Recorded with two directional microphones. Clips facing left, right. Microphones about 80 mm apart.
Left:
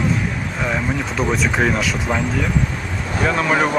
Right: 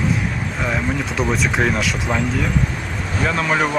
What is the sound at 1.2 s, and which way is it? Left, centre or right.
Speech, centre.